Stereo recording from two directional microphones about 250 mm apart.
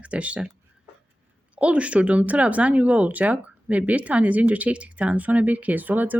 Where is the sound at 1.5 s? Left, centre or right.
Centre.